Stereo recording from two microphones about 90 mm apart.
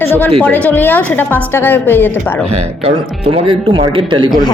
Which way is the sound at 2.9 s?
85° right.